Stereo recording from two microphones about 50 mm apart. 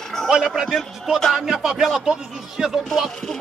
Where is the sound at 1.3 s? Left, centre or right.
Centre.